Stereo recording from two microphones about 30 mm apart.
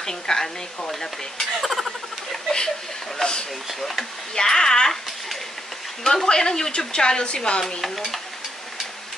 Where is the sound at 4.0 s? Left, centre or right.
Left.